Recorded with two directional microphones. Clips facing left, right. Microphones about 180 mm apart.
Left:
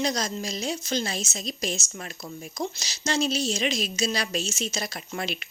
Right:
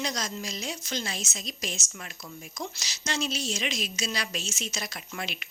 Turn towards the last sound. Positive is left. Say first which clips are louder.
# left 5 dB
turn(degrees=35)  # may be behind; listen again after turning